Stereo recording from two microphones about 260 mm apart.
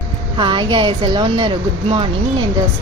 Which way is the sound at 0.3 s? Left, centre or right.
Centre.